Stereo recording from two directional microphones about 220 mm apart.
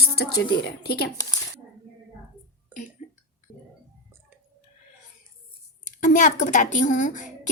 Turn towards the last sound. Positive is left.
turn(degrees=35)  # may be behind; listen again after turning